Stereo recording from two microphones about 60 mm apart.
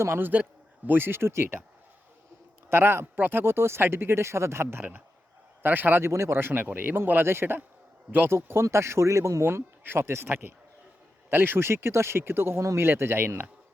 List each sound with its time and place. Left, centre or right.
0.0 s speech: right
2.6 s speech: right
4.8 s a man's voice: right
6.0 s speech: right
9.5 s speech: right